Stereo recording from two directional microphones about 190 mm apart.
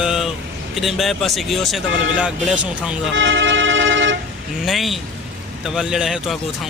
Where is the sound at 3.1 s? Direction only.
80° right.